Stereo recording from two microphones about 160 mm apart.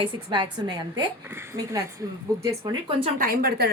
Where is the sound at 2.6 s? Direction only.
30° right (ahead or behind).